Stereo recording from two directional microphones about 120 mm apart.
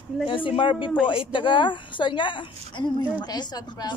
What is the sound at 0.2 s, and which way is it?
A woman's voice, 45° left (ahead or behind).